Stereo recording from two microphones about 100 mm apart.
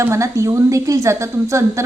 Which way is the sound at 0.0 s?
30° right (ahead or behind).